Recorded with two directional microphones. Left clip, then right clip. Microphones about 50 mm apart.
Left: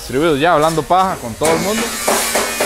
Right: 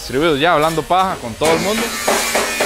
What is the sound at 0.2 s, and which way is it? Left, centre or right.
Speech, left.